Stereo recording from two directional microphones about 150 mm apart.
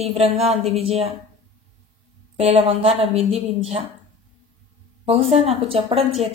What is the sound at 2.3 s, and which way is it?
A woman's voice, 45° right (ahead or behind).